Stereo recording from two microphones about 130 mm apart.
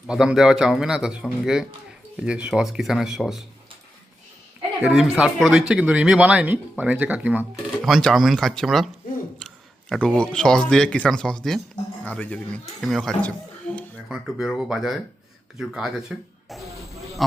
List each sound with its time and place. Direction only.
0.1 s a man's voice: 5° right (ahead or behind)
4.8 s speech: 5° right (ahead or behind)
9.9 s a man's voice: 5° left (ahead or behind)
14.1 s a man's voice: 5° right (ahead or behind)
16.6 s a sound: 25° right (ahead or behind)